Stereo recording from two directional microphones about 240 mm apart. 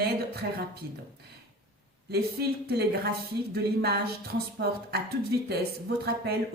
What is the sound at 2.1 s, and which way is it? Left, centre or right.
Speech, right.